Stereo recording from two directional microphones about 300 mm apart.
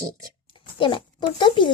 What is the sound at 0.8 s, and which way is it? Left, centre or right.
Speech, centre.